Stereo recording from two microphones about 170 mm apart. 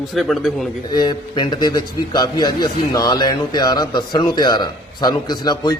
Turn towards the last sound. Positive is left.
turn(degrees=25)  # may be behind; listen again after turning